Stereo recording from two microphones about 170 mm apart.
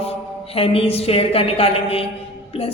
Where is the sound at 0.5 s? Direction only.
35° left (ahead or behind).